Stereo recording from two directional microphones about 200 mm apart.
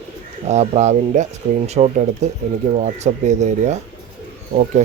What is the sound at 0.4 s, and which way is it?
Speech, 35° right (ahead or behind).